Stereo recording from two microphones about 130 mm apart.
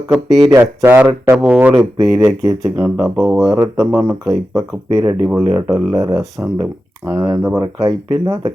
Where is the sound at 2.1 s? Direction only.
25° right (ahead or behind).